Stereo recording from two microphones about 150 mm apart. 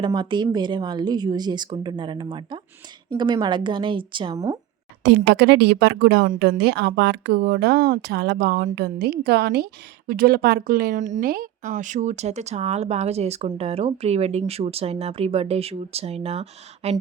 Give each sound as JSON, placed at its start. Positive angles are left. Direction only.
{"t": 0.0, "sound": "a woman's voice", "side_deg": -30}
{"t": 5.0, "sound": "a woman's voice", "side_deg": -90}
{"t": 11.7, "sound": "speech", "side_deg": -55}